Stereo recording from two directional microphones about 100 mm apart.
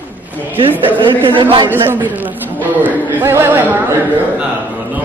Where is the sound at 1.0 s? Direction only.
55° right (ahead or behind).